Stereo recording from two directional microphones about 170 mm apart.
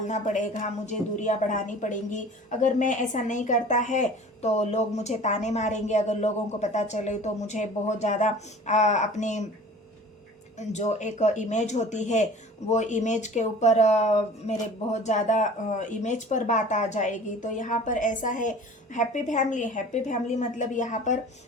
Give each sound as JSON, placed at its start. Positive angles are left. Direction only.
{"t": 0.1, "sound": "speech", "side_deg": 45}
{"t": 10.6, "sound": "speech", "side_deg": 40}